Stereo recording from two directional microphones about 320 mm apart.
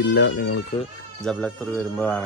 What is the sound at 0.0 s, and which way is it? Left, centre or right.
Speech, left.